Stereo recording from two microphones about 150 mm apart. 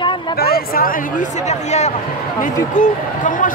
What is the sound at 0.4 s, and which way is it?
Speech, 90° left.